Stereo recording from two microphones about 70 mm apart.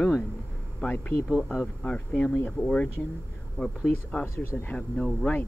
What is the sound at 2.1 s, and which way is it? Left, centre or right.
Speech, left.